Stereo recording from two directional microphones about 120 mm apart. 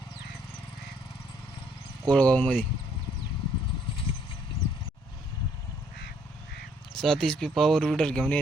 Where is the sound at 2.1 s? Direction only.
10° left (ahead or behind).